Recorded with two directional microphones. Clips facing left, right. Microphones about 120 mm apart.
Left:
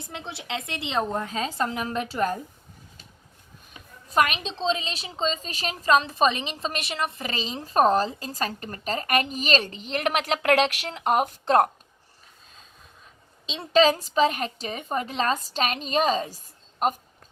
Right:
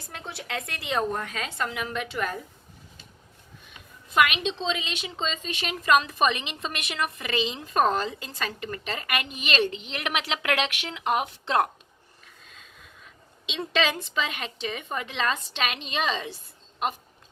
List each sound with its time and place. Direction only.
0.0 s a woman's voice: 25° left (ahead or behind)
3.7 s a woman's voice: 40° left (ahead or behind)
13.4 s a woman's voice: 35° left (ahead or behind)